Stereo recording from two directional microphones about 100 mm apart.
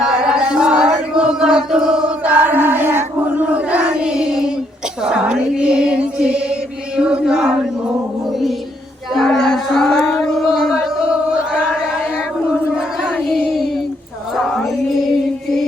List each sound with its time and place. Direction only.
0.0 s chant: 5° right (ahead or behind)
9.1 s a sound: centre (ahead or behind)
14.3 s music: centre (ahead or behind)